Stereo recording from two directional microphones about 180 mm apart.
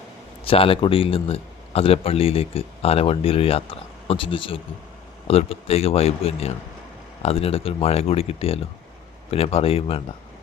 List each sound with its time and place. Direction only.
0.4 s a man's voice: 30° left (ahead or behind)